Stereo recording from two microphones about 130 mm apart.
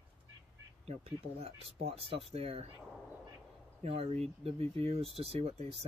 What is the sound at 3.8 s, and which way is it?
Speech, 50° right (ahead or behind).